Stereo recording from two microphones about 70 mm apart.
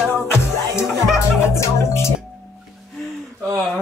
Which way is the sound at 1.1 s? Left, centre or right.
Left.